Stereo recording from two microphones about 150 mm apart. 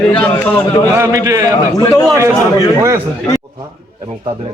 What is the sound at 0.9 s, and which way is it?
Speech, 20° right (ahead or behind).